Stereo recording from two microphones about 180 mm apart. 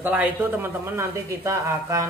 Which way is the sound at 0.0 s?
10° right (ahead or behind).